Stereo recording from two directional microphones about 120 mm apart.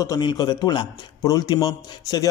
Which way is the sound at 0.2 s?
35° left (ahead or behind).